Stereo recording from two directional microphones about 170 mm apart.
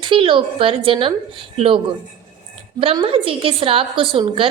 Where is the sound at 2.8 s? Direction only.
35° right (ahead or behind).